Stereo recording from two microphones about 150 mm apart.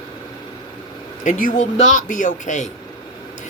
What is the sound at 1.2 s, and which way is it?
Speech, 60° left (ahead or behind).